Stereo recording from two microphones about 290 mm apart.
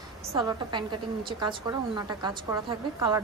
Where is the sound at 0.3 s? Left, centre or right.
Centre.